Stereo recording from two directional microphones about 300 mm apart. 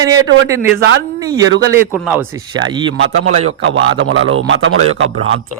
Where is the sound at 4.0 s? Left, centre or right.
Right.